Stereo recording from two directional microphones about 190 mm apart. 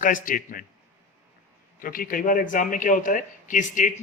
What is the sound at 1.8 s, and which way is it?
A man's voice, 50° left (ahead or behind).